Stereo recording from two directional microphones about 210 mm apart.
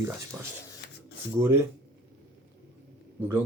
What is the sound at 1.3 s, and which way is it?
Speech, 10° right (ahead or behind).